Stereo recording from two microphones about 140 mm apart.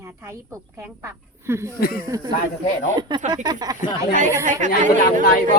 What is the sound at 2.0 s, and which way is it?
Speech, 25° right (ahead or behind).